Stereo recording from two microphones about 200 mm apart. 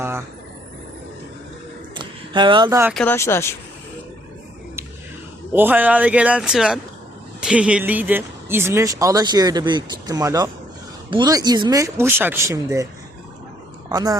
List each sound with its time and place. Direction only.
2.0 s a sound: 25° right (ahead or behind)
2.9 s speech: 5° left (ahead or behind)
5.5 s speech: 10° right (ahead or behind)
13.9 s speech: 20° right (ahead or behind)